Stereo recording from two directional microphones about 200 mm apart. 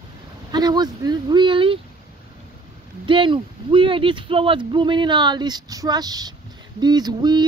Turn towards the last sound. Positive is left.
turn(degrees=-20)  # may be behind; listen again after turning